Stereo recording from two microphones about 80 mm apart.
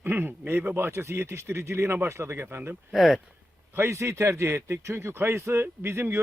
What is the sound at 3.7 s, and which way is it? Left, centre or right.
Speech, right.